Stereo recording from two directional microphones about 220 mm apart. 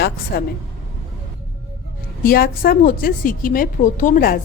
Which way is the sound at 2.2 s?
40° left (ahead or behind).